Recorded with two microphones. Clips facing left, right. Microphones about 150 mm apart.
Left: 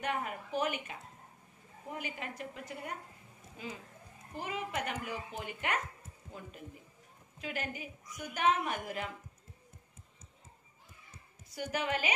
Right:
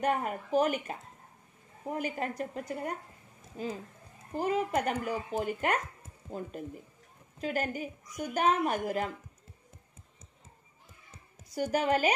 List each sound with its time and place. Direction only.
0.0 s a woman's voice: 40° right (ahead or behind)
11.5 s a woman's voice: 40° right (ahead or behind)